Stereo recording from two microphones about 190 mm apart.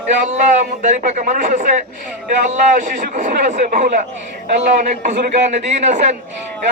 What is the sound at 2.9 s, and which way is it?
A man's voice, 40° right (ahead or behind).